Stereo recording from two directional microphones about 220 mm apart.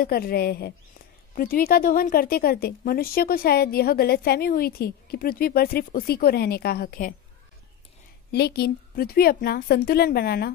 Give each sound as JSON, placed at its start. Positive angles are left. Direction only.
{"t": 0.0, "sound": "speech", "side_deg": 45}
{"t": 8.3, "sound": "speech", "side_deg": 50}